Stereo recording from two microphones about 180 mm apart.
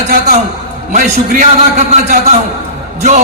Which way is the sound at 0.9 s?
45° right (ahead or behind).